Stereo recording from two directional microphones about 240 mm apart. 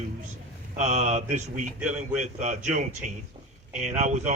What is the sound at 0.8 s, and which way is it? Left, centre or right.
Speech, right.